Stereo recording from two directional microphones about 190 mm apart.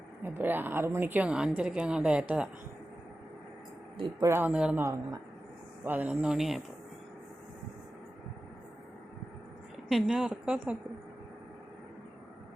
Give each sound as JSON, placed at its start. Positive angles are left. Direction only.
{"t": 0.2, "sound": "a woman's voice", "side_deg": -10}
{"t": 3.9, "sound": "speech", "side_deg": -25}
{"t": 4.3, "sound": "a woman's voice", "side_deg": -10}
{"t": 5.8, "sound": "a woman's voice", "side_deg": -10}
{"t": 9.9, "sound": "a woman's voice", "side_deg": 0}